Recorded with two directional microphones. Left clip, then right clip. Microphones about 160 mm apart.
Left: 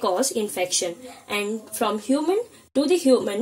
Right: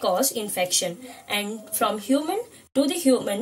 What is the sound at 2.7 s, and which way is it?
Speech, 40° left (ahead or behind).